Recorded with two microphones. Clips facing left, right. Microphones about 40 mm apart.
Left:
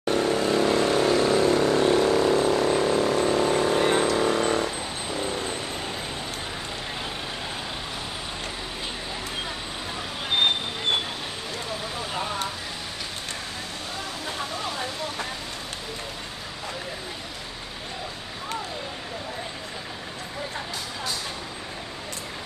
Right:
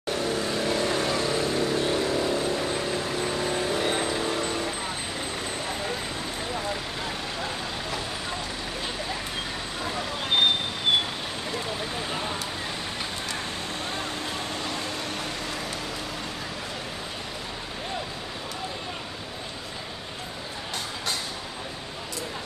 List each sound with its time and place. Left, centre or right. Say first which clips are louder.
0.2 s vehicle: left 5 dB; left